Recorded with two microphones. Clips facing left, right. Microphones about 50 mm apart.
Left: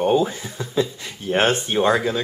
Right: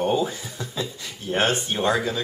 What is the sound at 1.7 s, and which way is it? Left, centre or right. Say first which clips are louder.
Speech: left 6 dB; centre.